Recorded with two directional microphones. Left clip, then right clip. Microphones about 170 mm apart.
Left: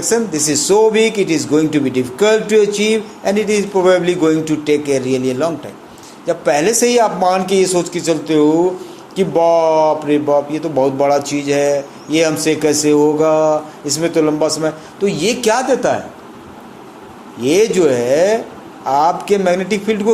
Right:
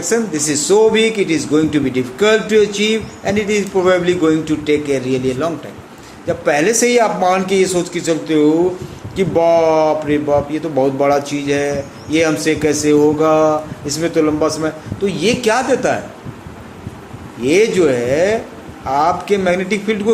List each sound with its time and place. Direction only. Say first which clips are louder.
0.0 s speech: left 1 dB; 20° left (ahead or behind)
17.4 s speech: even; 20° left (ahead or behind)